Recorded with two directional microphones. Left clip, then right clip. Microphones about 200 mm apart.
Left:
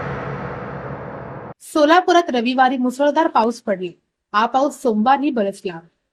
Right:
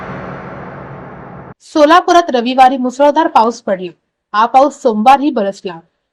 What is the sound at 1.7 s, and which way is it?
A woman's voice, 5° right (ahead or behind).